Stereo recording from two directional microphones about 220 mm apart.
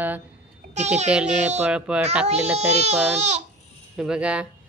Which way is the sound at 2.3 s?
30° right (ahead or behind).